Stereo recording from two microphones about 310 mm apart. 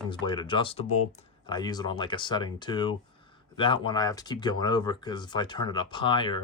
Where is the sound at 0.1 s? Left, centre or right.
Centre.